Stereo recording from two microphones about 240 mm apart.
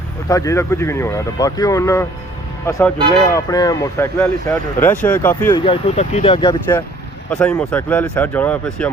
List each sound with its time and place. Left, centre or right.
0.3 s speech: centre
5.5 s speech: left
7.3 s speech: centre